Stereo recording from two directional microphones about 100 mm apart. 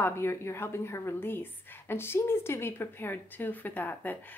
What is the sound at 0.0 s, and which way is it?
Speech, 25° left (ahead or behind).